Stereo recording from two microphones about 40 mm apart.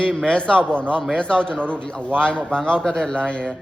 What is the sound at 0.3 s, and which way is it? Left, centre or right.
A man's voice, left.